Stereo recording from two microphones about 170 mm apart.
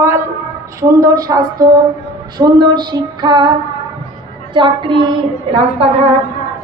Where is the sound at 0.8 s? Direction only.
20° right (ahead or behind).